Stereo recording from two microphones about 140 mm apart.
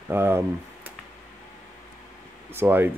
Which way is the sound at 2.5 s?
15° right (ahead or behind).